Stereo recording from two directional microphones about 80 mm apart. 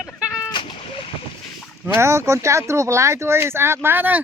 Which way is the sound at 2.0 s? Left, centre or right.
Right.